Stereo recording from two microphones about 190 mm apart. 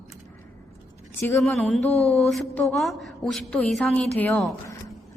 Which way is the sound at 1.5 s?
5° left (ahead or behind).